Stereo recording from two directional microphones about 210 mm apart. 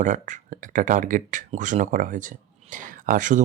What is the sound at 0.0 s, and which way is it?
Speech, 35° right (ahead or behind).